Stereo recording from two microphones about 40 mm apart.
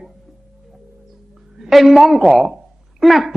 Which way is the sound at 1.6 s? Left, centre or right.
Centre.